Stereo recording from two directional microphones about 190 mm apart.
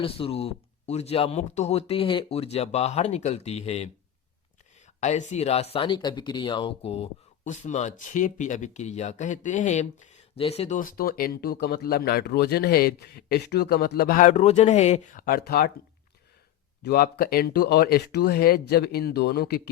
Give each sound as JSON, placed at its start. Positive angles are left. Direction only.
{"t": 0.0, "sound": "speech", "side_deg": 30}
{"t": 4.9, "sound": "speech", "side_deg": 40}
{"t": 10.8, "sound": "speech", "side_deg": 50}
{"t": 16.8, "sound": "speech", "side_deg": 60}